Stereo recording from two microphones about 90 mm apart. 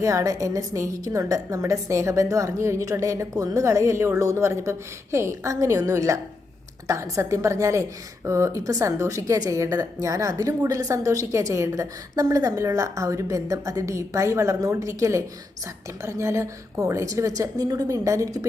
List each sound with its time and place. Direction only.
0.0 s a woman's voice: 35° right (ahead or behind)